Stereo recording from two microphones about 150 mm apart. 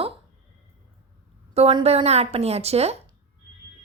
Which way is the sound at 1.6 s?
40° right (ahead or behind).